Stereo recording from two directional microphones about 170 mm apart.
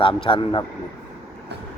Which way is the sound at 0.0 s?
30° left (ahead or behind).